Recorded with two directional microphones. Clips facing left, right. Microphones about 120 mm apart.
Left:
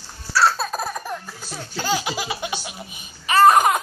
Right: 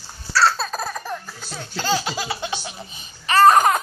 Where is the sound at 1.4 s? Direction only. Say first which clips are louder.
Right 1 dB; 10° left (ahead or behind).